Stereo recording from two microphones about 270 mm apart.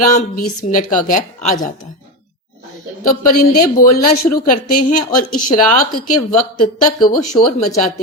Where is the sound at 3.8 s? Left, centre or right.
Left.